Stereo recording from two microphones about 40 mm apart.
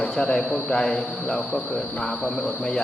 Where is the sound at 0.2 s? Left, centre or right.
Left.